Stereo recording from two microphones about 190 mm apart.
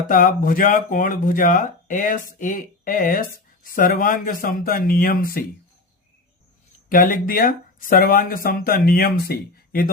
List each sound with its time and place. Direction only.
0.1 s speech: 45° left (ahead or behind)
6.8 s speech: 45° left (ahead or behind)